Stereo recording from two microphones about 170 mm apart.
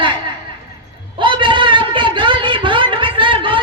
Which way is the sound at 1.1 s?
30° right (ahead or behind).